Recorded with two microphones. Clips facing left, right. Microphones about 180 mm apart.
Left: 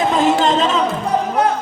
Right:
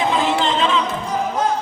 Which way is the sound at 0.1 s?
40° left (ahead or behind).